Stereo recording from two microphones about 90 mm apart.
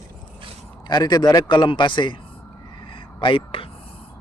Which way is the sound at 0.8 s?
50° left (ahead or behind).